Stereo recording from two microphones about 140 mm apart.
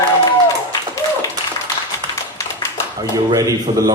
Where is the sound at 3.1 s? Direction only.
25° right (ahead or behind).